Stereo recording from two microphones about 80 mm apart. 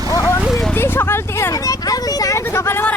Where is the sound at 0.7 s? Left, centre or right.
Left.